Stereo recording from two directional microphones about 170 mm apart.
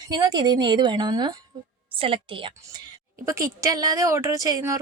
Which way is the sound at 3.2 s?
20° right (ahead or behind).